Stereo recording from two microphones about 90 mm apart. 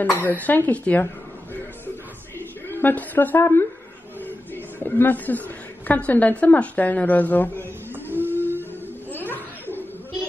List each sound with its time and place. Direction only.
0.0 s a woman's voice: 20° left (ahead or behind)
2.7 s a woman's voice: 20° left (ahead or behind)
4.7 s a woman's voice: 20° left (ahead or behind)
8.2 s music: 20° left (ahead or behind)
9.3 s laughter: 20° left (ahead or behind)